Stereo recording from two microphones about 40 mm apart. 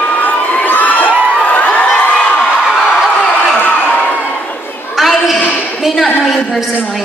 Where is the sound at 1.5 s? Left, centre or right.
Left.